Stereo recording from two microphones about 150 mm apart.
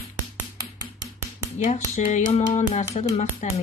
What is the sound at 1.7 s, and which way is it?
Speech, 50° left (ahead or behind).